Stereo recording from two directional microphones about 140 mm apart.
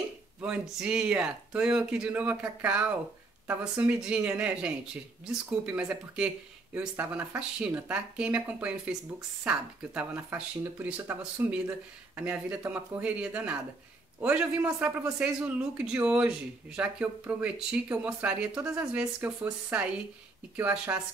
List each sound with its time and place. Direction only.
0.4 s a man's voice: 5° right (ahead or behind)